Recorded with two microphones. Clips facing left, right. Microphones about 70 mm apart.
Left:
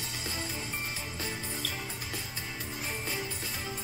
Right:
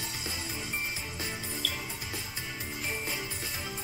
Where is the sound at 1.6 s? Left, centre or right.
Left.